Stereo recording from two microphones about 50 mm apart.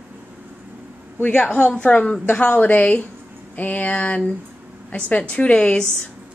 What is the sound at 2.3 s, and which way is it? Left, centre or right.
Speech, left.